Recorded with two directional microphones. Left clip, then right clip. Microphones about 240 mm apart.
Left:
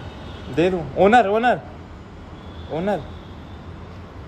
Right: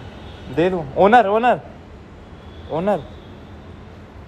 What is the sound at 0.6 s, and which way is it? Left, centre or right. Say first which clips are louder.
Speech: right 2 dB; centre.